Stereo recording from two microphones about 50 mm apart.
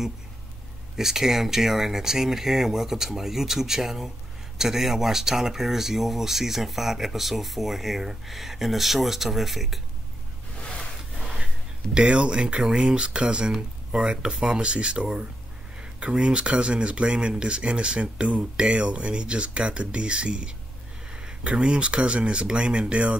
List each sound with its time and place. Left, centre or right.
0.9 s speech: centre
10.6 s a sound: centre
11.3 s speech: centre